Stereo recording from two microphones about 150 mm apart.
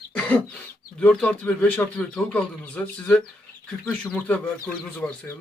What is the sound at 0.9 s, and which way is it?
Speech, 10° left (ahead or behind).